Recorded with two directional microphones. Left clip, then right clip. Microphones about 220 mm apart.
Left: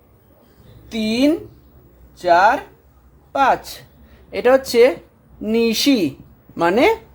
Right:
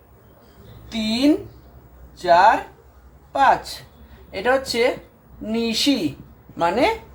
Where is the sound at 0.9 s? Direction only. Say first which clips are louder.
Left 2 dB; 50° left (ahead or behind).